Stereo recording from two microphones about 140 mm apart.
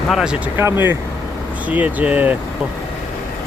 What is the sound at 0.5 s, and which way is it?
Speech, 15° right (ahead or behind).